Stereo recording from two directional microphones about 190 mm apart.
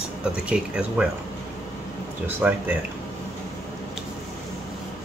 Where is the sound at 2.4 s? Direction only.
5° right (ahead or behind).